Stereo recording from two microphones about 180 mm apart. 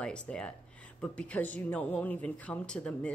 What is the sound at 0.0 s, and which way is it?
Speech, 5° left (ahead or behind).